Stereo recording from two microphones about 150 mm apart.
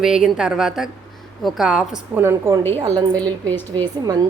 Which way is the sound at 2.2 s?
15° right (ahead or behind).